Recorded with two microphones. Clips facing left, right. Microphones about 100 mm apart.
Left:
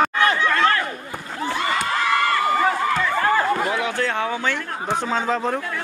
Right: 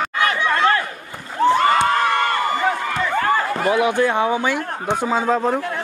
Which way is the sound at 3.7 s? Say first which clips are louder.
Right 6 dB; 15° right (ahead or behind).